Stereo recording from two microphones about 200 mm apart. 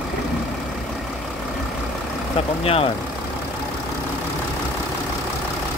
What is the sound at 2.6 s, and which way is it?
Speech, 30° left (ahead or behind).